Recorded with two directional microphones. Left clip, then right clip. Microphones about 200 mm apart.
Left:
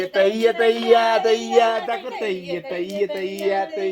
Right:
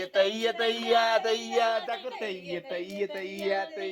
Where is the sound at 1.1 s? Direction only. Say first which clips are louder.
Left 8 dB; 40° right (ahead or behind).